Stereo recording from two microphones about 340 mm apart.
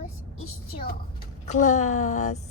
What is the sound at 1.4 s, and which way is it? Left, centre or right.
Speech, left.